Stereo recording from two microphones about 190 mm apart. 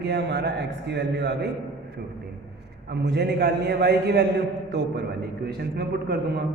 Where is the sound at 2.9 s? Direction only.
60° right (ahead or behind).